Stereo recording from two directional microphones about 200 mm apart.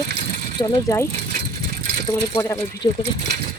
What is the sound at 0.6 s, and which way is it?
Speech, 20° left (ahead or behind).